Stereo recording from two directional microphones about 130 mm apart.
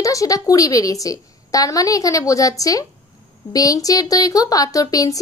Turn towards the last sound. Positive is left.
turn(degrees=25)  # may be behind; listen again after turning